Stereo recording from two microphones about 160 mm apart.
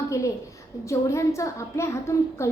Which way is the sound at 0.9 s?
20° left (ahead or behind).